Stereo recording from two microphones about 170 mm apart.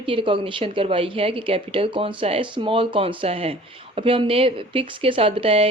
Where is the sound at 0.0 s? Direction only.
30° right (ahead or behind).